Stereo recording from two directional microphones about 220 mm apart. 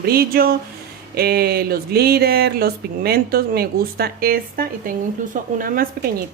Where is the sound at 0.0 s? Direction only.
45° right (ahead or behind).